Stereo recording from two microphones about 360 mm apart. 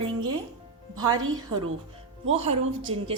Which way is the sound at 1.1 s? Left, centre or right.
Right.